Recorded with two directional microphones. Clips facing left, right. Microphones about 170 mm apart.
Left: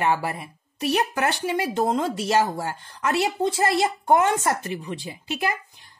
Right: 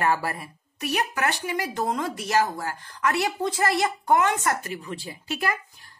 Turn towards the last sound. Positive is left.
turn(degrees=20)  # may be behind; listen again after turning